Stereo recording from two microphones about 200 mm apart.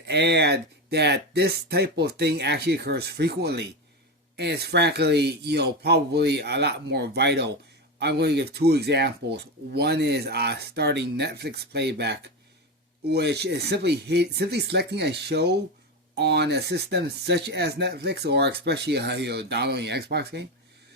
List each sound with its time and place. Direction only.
0.0 s speech: 55° right (ahead or behind)